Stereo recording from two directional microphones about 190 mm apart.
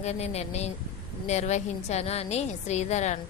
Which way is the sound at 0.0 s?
35° left (ahead or behind).